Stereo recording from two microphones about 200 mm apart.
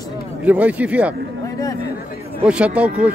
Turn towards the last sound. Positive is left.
turn(degrees=-5)  # may be behind; listen again after turning